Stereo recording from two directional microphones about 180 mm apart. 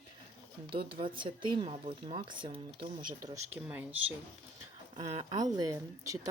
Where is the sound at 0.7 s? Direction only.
30° right (ahead or behind).